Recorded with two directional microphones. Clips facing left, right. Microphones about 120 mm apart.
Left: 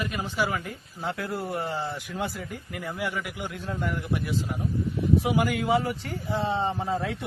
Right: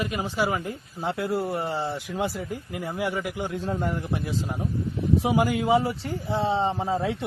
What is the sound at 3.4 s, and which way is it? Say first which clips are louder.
A man's voice: right 4 dB; 35° right (ahead or behind).